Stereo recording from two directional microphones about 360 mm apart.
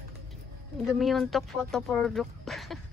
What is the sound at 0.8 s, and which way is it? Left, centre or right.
Speech, centre.